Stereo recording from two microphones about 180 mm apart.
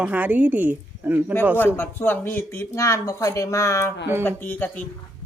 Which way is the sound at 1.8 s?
10° left (ahead or behind).